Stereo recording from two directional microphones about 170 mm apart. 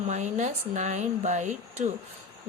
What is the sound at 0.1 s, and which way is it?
A woman's voice, 40° right (ahead or behind).